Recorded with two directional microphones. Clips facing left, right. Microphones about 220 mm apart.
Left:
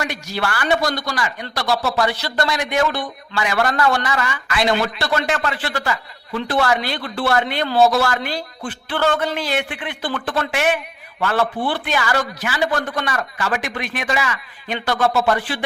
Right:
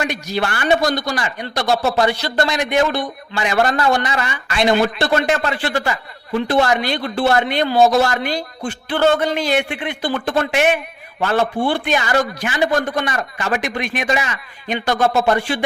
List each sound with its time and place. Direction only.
0.0 s a man's voice: 20° right (ahead or behind)